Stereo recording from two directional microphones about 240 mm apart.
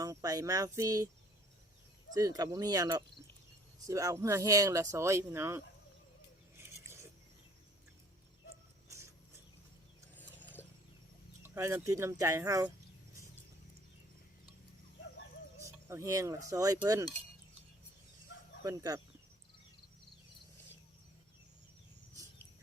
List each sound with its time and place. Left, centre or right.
0.0 s speech: centre
2.1 s speech: centre
8.9 s a sound: centre
10.6 s mechanisms: centre
11.4 s speech: centre
15.6 s speech: centre
18.6 s speech: centre